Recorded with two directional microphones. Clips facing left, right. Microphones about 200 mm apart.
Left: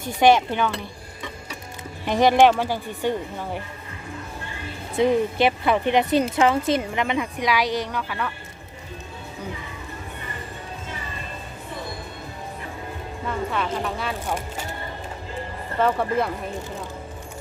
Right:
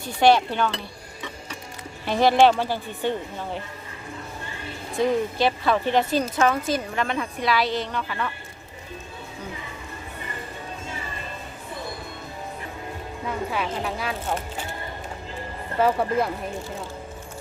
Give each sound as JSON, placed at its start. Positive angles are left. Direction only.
{"t": 0.2, "sound": "speech", "side_deg": 15}
{"t": 2.0, "sound": "speech", "side_deg": 15}
{"t": 4.9, "sound": "speech", "side_deg": 20}
{"t": 13.2, "sound": "speech", "side_deg": -5}
{"t": 14.3, "sound": "speech", "side_deg": 10}
{"t": 15.8, "sound": "speech", "side_deg": -5}